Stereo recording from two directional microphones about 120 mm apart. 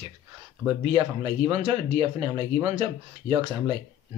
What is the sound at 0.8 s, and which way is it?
Speech, 55° right (ahead or behind).